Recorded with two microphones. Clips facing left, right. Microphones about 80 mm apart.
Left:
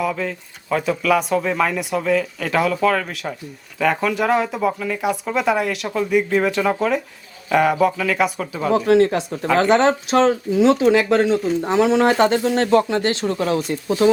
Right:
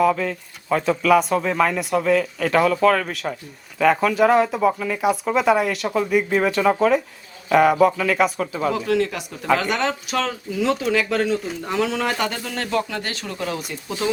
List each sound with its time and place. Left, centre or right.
0.0 s speech: centre
8.9 s speech: left